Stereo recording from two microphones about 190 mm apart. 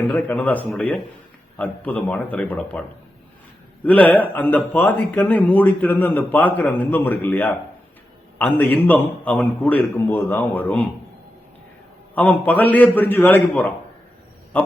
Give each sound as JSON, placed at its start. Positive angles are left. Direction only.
{"t": 0.1, "sound": "a man's voice", "side_deg": 10}
{"t": 3.8, "sound": "a man's voice", "side_deg": 10}
{"t": 12.1, "sound": "a man's voice", "side_deg": 10}